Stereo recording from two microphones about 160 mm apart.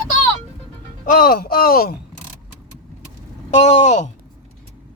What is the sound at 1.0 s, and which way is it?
Speech, 60° left (ahead or behind).